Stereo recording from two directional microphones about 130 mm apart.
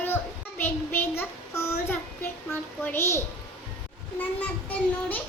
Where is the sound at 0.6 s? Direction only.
15° left (ahead or behind).